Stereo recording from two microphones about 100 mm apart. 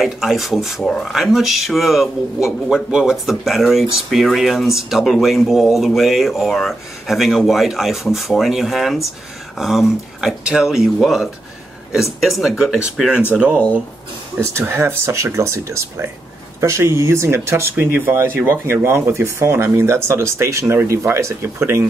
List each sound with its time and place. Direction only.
0.0 s speech: centre (ahead or behind)
14.4 s speech: 25° right (ahead or behind)